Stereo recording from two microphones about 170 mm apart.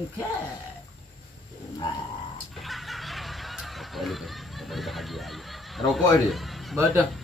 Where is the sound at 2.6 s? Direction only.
Centre (ahead or behind).